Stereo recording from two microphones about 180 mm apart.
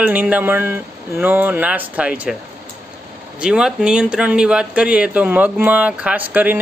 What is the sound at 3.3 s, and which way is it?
Speech, 5° right (ahead or behind).